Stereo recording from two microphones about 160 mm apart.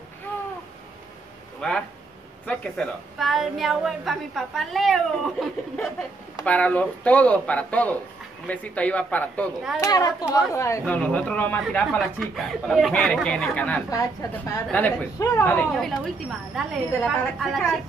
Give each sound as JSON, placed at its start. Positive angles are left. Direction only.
{"t": 0.3, "sound": "a sound", "side_deg": 10}
{"t": 1.6, "sound": "a woman's voice", "side_deg": 5}
{"t": 9.8, "sound": "speech", "side_deg": 25}
{"t": 15.7, "sound": "a woman's voice", "side_deg": 0}